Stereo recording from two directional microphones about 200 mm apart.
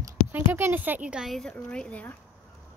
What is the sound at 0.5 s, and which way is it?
Speech, 10° right (ahead or behind).